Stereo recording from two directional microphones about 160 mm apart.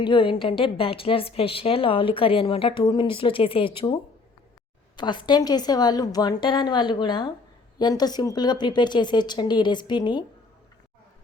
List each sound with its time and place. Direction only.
0.0 s a woman's voice: 30° left (ahead or behind)
4.9 s a woman's voice: 30° left (ahead or behind)